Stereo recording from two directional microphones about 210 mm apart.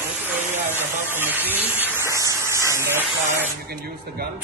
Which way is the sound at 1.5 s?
10° right (ahead or behind).